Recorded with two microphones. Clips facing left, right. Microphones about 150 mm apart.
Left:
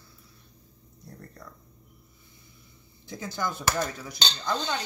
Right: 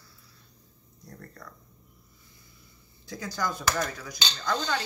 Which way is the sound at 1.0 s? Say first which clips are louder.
Even; 20° left (ahead or behind).